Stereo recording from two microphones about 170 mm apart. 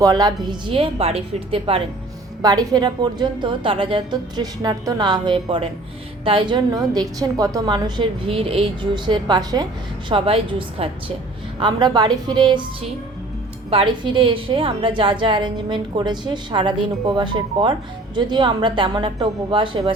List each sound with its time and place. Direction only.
0.0 s a woman's voice: 20° right (ahead or behind)
13.7 s a woman's voice: 30° right (ahead or behind)